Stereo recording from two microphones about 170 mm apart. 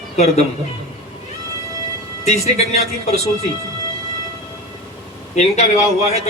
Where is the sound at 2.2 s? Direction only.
40° left (ahead or behind).